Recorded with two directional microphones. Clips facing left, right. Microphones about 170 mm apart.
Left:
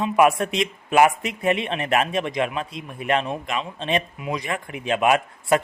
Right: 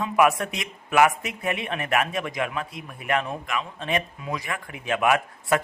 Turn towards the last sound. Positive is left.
turn(degrees=20)  # may be behind; listen again after turning